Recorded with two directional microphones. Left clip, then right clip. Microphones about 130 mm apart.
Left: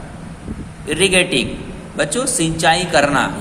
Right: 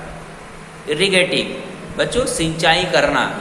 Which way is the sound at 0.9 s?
75° left (ahead or behind).